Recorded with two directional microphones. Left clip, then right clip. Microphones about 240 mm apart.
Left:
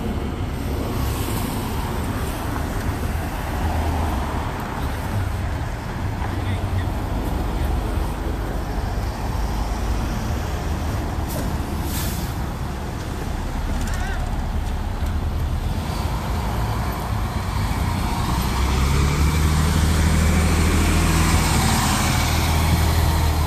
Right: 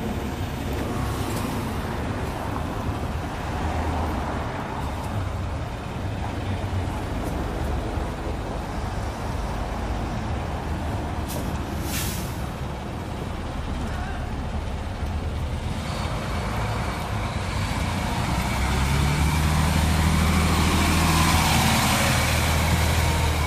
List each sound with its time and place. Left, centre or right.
20.0 s vehicle: right